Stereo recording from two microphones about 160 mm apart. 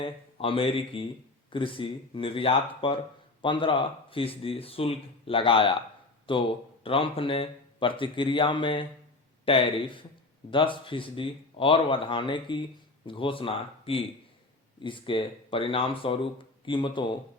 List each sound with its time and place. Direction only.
0.0 s speech: 35° left (ahead or behind)